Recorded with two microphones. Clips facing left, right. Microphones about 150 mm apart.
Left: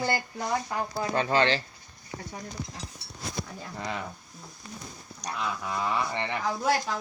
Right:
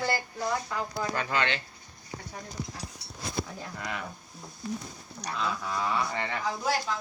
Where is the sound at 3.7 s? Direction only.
30° left (ahead or behind).